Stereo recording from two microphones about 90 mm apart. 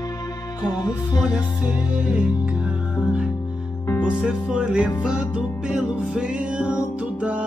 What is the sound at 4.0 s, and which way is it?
Music, 10° right (ahead or behind).